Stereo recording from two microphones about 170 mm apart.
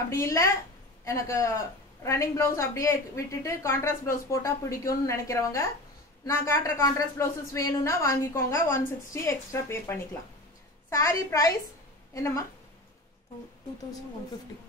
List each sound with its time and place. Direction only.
0.1 s a woman's voice: 15° left (ahead or behind)